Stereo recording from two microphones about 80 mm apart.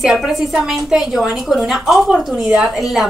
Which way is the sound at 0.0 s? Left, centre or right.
Centre.